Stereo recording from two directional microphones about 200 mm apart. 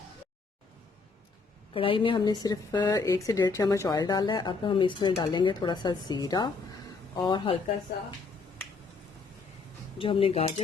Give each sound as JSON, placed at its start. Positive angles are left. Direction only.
{"t": 1.7, "sound": "speech", "side_deg": 25}
{"t": 10.0, "sound": "speech", "side_deg": 25}